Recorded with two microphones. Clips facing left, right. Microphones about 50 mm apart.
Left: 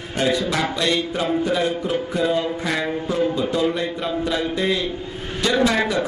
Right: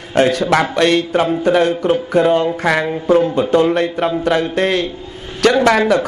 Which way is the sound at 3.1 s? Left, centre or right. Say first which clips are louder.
Right 10 dB; right.